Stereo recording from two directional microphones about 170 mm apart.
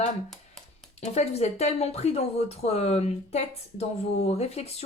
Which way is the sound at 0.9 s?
40° left (ahead or behind).